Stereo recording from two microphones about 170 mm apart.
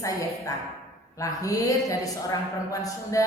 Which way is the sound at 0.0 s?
20° left (ahead or behind).